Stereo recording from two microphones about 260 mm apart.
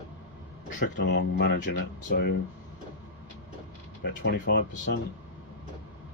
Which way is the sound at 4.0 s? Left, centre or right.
Left.